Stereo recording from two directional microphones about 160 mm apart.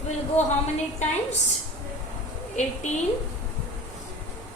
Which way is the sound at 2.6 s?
45° left (ahead or behind).